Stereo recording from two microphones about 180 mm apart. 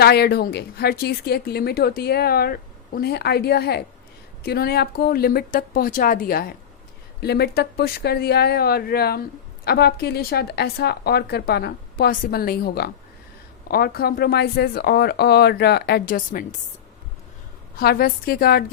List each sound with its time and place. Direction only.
0.0 s a woman's voice: 60° left (ahead or behind)
17.7 s a woman's voice: 55° left (ahead or behind)